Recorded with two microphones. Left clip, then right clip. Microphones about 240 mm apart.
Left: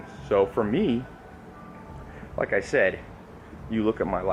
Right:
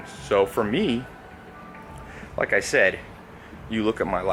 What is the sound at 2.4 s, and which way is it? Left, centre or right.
Speech, centre.